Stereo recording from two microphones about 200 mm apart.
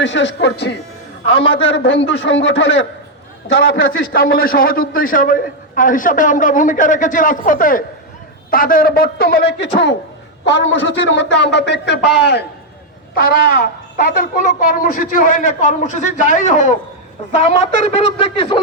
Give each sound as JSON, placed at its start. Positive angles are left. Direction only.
{"t": 0.0, "sound": "a man's voice", "side_deg": 65}
{"t": 1.3, "sound": "a man's voice", "side_deg": 30}
{"t": 1.6, "sound": "a man's voice", "side_deg": 65}
{"t": 3.9, "sound": "a man's voice", "side_deg": 45}